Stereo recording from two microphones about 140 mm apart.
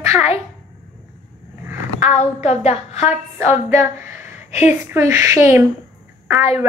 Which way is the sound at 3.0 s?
15° right (ahead or behind).